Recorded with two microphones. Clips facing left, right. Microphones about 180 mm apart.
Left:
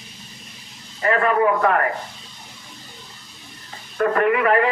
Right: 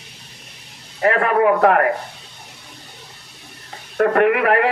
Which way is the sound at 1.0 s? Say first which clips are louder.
Right 2 dB; 65° right (ahead or behind).